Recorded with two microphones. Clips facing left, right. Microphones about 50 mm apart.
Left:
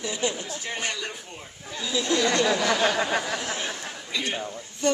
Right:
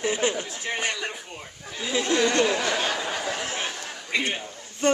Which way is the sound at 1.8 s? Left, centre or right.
Right.